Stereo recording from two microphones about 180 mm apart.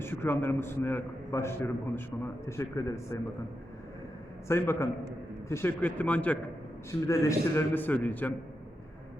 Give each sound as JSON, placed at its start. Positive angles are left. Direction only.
{"t": 0.0, "sound": "a man's voice", "side_deg": 10}
{"t": 4.4, "sound": "a man's voice", "side_deg": 15}